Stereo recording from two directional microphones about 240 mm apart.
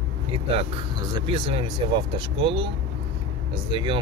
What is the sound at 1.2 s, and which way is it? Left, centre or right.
Speech, right.